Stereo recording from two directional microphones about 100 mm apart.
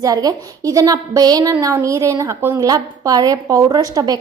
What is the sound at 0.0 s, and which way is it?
A woman's voice, 35° right (ahead or behind).